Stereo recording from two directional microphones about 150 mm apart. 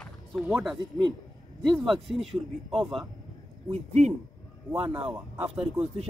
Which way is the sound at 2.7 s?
Centre (ahead or behind).